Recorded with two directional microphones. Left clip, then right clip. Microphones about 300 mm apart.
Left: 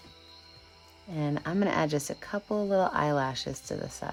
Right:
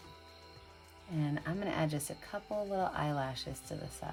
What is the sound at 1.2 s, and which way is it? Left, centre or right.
Speech, centre.